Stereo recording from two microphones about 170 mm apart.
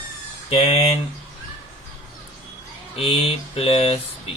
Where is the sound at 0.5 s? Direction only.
35° left (ahead or behind).